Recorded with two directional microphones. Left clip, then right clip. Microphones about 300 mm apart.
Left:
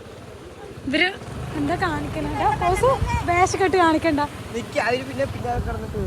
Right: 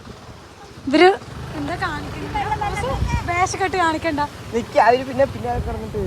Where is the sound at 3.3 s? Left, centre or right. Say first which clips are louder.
Left 1 dB; centre.